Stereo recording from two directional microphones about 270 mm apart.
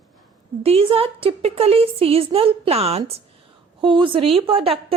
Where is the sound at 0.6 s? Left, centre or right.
Right.